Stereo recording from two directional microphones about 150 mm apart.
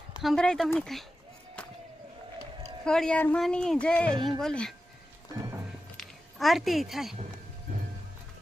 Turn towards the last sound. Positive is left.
turn(degrees=0)  # may be behind; listen again after turning